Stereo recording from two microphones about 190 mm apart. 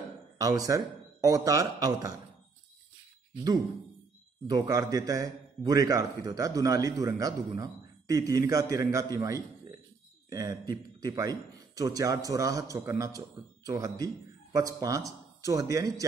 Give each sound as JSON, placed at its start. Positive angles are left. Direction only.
{"t": 0.4, "sound": "a man's voice", "side_deg": -20}
{"t": 4.5, "sound": "a man's voice", "side_deg": -20}